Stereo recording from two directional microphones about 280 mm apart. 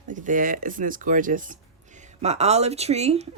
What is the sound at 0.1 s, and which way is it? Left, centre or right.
Speech, right.